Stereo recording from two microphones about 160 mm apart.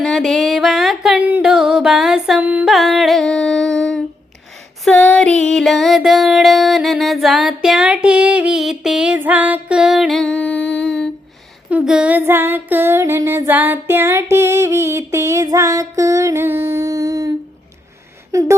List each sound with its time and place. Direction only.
0.0 s music: centre (ahead or behind)
11.7 s female singing: 5° right (ahead or behind)
18.3 s a sound: 20° right (ahead or behind)